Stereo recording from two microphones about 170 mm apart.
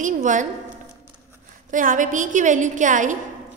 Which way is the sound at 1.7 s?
50° right (ahead or behind).